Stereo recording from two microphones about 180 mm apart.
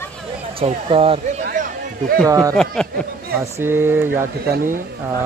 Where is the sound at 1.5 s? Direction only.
50° right (ahead or behind).